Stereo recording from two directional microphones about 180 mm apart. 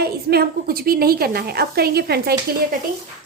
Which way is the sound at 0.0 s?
60° right (ahead or behind).